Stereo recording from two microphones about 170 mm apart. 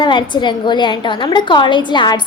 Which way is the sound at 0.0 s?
25° left (ahead or behind).